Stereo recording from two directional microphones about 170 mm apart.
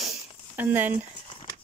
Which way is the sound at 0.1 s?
10° right (ahead or behind).